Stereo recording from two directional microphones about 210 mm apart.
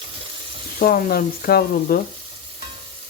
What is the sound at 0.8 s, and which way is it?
Frying, 45° left (ahead or behind).